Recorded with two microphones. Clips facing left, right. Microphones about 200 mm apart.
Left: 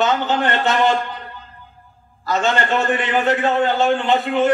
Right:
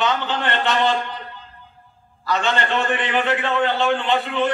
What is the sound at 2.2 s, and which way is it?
A man's voice, 45° left (ahead or behind).